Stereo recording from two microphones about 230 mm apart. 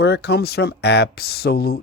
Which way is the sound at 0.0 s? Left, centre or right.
Left.